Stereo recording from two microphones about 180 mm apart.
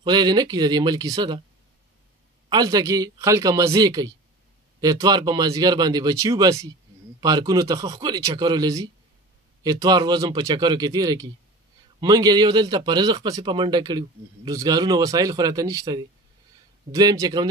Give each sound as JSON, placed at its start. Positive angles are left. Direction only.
{"t": 0.0, "sound": "a man's voice", "side_deg": -25}
{"t": 2.5, "sound": "a man's voice", "side_deg": -20}